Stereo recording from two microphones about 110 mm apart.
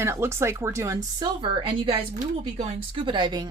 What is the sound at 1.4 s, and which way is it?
A woman's voice, 50° right (ahead or behind).